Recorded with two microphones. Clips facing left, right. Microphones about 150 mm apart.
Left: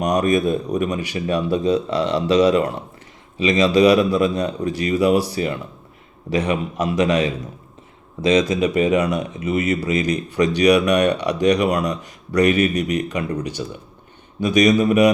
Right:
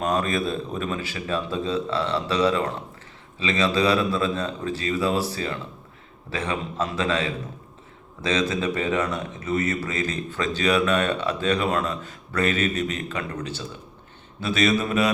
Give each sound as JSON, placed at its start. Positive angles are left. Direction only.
{"t": 0.0, "sound": "speech", "side_deg": 15}